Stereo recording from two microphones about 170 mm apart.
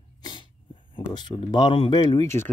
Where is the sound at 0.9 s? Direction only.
25° left (ahead or behind).